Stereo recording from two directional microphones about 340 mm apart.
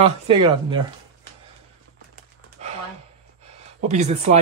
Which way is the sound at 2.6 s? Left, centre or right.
Centre.